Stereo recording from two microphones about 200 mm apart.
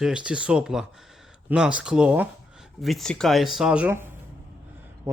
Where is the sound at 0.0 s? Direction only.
5° right (ahead or behind).